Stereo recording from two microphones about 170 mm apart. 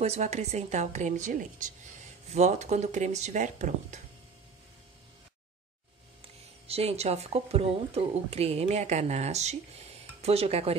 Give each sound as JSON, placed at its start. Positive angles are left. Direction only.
{"t": 0.0, "sound": "a woman's voice", "side_deg": -40}
{"t": 6.2, "sound": "speech", "side_deg": -35}